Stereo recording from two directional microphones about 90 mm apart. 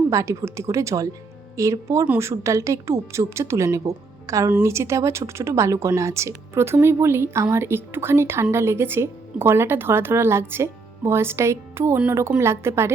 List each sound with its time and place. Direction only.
0.1 s a woman's voice: 35° right (ahead or behind)